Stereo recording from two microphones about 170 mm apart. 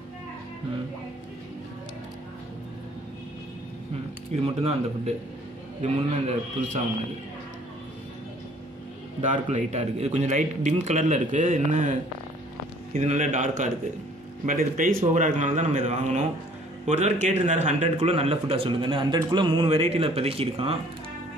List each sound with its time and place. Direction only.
4.6 s a man's voice: 40° right (ahead or behind)
9.2 s a man's voice: 45° right (ahead or behind)